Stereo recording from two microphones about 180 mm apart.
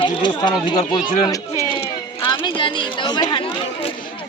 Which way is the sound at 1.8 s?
30° left (ahead or behind).